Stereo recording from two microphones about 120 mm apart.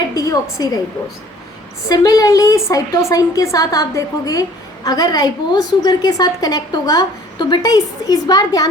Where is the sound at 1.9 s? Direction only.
30° left (ahead or behind).